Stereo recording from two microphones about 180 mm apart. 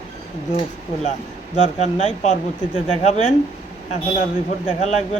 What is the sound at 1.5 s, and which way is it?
Speech, 40° left (ahead or behind).